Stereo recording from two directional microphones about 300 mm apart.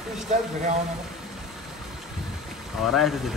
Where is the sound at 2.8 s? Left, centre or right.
Centre.